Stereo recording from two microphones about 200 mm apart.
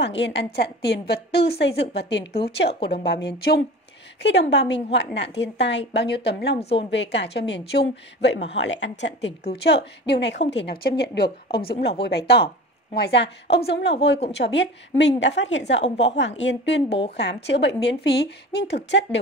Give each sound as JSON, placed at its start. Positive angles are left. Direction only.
{"t": 0.0, "sound": "a woman's voice", "side_deg": 60}
{"t": 6.6, "sound": "speech", "side_deg": 30}
{"t": 6.9, "sound": "a woman's voice", "side_deg": 60}